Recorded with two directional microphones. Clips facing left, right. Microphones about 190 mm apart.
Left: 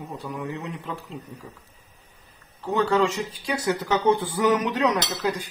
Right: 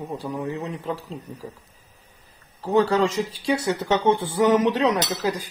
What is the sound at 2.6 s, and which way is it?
Speech, 30° right (ahead or behind).